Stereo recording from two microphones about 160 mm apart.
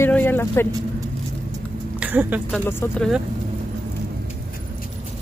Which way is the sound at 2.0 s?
10° right (ahead or behind).